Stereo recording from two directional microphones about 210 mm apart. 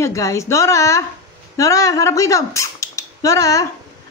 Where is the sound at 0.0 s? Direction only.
15° left (ahead or behind).